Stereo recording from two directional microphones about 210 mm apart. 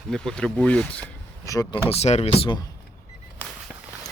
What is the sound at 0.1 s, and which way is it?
Speech, 5° left (ahead or behind).